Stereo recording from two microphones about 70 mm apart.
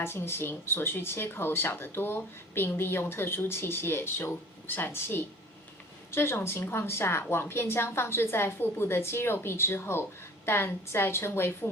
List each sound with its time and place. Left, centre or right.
0.0 s a woman's voice: left